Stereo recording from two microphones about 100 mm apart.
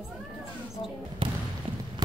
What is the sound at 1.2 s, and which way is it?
Basketball bounce, 65° right (ahead or behind).